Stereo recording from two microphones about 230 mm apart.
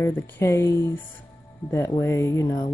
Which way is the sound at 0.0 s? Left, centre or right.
Centre.